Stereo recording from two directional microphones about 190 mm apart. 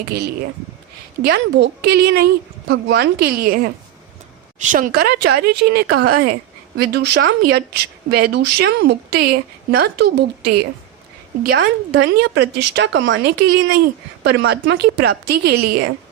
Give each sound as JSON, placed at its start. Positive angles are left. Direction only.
{"t": 0.1, "sound": "a woman's voice", "side_deg": -55}
{"t": 4.9, "sound": "a woman's voice", "side_deg": -55}
{"t": 11.6, "sound": "a woman's voice", "side_deg": -65}